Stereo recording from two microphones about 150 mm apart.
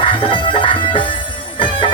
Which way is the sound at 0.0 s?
35° left (ahead or behind).